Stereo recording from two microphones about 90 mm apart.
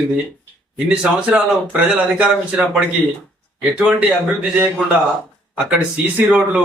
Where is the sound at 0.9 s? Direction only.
10° right (ahead or behind).